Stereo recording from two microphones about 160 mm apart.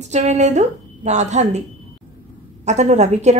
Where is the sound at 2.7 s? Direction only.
45° right (ahead or behind).